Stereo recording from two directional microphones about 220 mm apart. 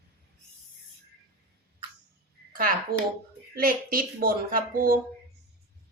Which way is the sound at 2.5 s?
40° right (ahead or behind).